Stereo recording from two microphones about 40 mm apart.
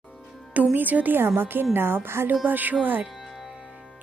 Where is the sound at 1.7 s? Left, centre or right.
Right.